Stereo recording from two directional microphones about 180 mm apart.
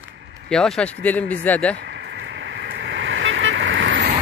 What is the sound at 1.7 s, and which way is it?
Vehicle, 85° right.